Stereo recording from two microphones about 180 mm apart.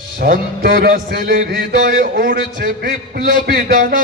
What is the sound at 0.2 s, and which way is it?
Music, 50° right (ahead or behind).